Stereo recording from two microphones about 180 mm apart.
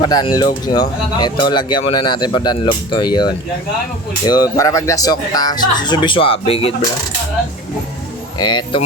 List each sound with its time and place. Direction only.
0.0 s speech: 25° left (ahead or behind)
8.4 s speech: 25° left (ahead or behind)